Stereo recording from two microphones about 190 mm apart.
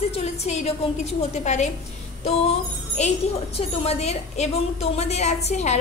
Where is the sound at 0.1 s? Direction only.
35° left (ahead or behind).